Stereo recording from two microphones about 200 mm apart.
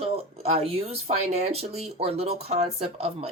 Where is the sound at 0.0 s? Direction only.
30° right (ahead or behind).